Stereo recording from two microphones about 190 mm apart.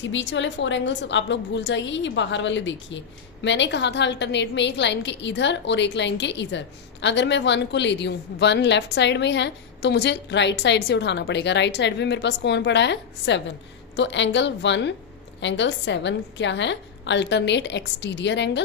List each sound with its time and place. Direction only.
0.0 s a woman's voice: 75° left (ahead or behind)